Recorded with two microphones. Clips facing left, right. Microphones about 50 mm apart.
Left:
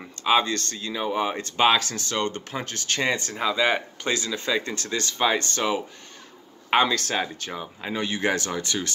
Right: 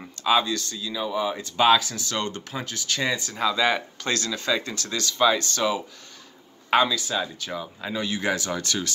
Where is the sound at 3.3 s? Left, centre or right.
Left.